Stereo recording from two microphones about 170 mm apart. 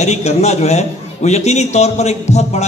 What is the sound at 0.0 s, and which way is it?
Speech, 40° left (ahead or behind).